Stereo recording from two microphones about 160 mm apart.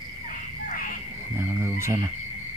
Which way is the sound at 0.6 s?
55° left (ahead or behind).